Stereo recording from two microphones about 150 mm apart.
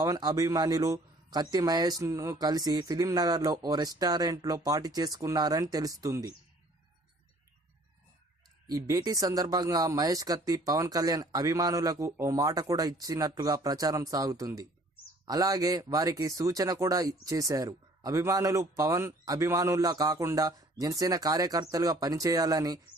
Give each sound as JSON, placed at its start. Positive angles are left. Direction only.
{"t": 0.0, "sound": "speech", "side_deg": -25}
{"t": 8.6, "sound": "speech", "side_deg": -20}